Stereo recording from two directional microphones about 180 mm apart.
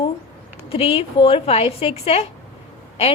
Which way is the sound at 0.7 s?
35° left (ahead or behind).